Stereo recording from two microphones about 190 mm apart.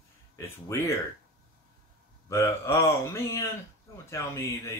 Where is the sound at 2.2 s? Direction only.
15° left (ahead or behind).